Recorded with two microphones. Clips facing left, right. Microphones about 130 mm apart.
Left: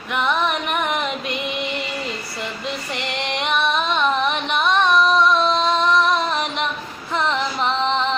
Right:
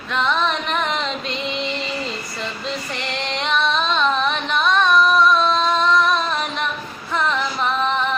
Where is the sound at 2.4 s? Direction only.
15° left (ahead or behind).